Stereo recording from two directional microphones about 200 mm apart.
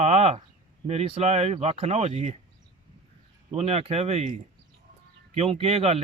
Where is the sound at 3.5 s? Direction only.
30° right (ahead or behind).